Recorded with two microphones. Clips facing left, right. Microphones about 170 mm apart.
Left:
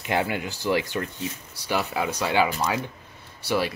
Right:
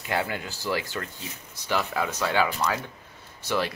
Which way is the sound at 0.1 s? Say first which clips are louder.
Left 3 dB; 15° left (ahead or behind).